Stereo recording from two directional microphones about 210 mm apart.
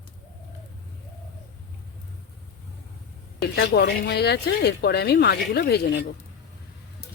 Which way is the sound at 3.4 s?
50° left (ahead or behind).